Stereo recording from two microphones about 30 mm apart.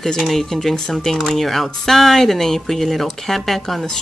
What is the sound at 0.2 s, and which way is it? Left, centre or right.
Speech, centre.